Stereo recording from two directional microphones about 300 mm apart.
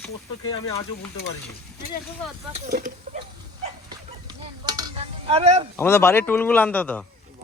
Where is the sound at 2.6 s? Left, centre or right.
Right.